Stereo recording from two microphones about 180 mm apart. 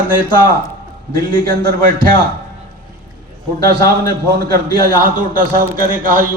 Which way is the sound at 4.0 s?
55° right (ahead or behind).